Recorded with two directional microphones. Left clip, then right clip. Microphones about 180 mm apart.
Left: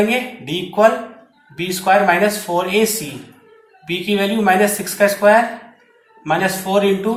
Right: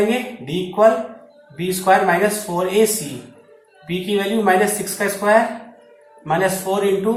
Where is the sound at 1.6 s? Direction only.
35° left (ahead or behind).